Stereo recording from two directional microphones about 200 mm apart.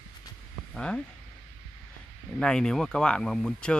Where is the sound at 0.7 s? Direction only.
5° left (ahead or behind).